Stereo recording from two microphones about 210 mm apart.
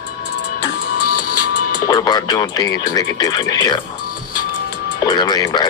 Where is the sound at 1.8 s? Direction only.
20° left (ahead or behind).